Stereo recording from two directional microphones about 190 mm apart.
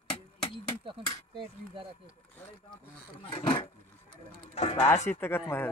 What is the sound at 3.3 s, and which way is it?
Speech, 30° left (ahead or behind).